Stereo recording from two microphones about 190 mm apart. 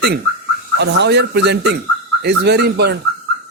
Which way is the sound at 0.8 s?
60° right (ahead or behind).